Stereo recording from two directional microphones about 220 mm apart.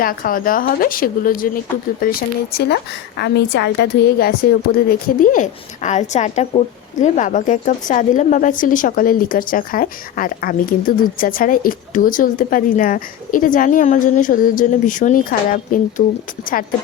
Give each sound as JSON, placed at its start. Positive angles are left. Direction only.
{"t": 0.0, "sound": "a woman's voice", "side_deg": 40}